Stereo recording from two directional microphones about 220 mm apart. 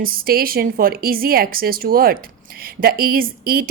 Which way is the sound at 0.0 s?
40° right (ahead or behind).